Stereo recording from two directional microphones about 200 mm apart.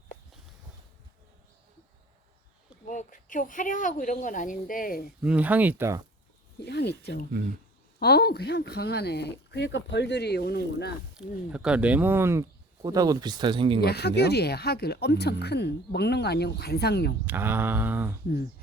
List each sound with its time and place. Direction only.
2.8 s speech: 40° left (ahead or behind)
5.2 s speech: 5° right (ahead or behind)
6.7 s speech: 55° left (ahead or behind)
11.1 s speech: 5° right (ahead or behind); by 13.8 s 25° right (ahead or behind)
13.8 s speech: 55° left (ahead or behind)
17.2 s speech: 10° right (ahead or behind)